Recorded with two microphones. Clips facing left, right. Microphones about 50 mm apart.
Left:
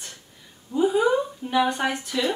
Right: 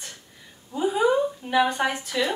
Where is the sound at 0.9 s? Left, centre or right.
Centre.